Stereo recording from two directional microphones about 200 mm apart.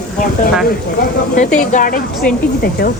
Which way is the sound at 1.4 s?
40° left (ahead or behind).